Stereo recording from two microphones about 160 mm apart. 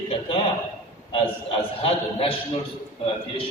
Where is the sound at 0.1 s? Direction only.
35° left (ahead or behind).